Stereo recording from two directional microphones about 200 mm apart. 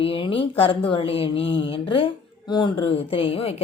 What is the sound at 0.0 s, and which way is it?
Speech, 25° left (ahead or behind).